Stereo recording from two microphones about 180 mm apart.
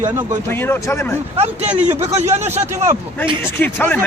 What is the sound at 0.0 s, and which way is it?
Speech, 20° right (ahead or behind).